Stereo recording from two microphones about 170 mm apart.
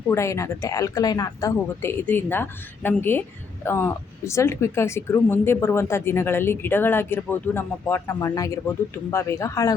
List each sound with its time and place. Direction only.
0.1 s a woman's voice: 15° left (ahead or behind)